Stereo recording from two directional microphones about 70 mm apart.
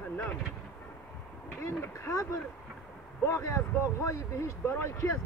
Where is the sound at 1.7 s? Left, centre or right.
Left.